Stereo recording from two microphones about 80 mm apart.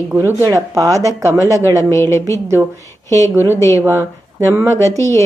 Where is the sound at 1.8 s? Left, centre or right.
Left.